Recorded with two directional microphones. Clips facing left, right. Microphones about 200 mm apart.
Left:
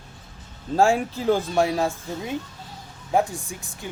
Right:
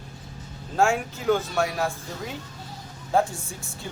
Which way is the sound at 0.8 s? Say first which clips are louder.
Left 3 dB; 35° left (ahead or behind).